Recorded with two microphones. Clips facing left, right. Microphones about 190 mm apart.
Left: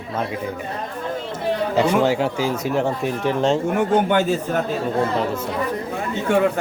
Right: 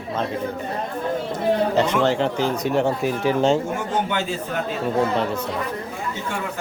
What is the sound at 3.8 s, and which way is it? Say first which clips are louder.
Speech: left 6 dB; 55° left (ahead or behind).